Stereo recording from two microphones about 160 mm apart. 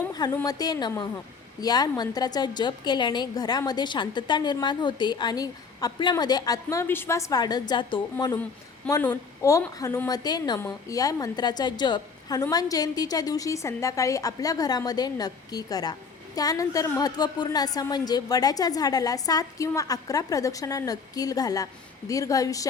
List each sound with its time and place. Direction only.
0.4 s a woman's voice: 25° left (ahead or behind)
8.9 s a woman's voice: 15° left (ahead or behind)